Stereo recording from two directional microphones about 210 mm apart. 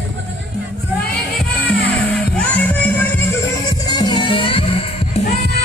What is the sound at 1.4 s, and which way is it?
Music, 5° left (ahead or behind).